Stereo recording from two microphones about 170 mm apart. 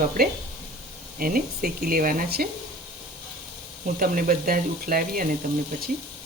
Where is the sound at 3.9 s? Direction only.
55° right (ahead or behind).